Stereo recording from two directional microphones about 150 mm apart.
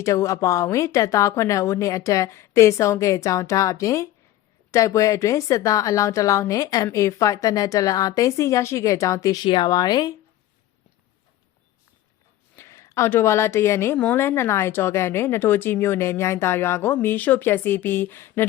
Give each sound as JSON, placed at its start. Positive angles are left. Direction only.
{"t": 0.0, "sound": "a woman's voice", "side_deg": 20}
{"t": 12.5, "sound": "speech", "side_deg": 20}